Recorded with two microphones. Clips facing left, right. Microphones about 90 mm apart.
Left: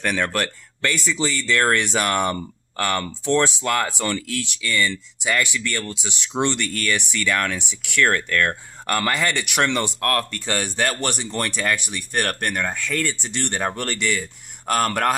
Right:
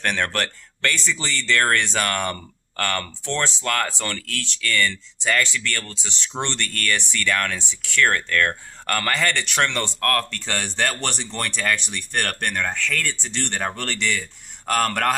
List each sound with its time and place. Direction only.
0.0 s speech: 5° left (ahead or behind)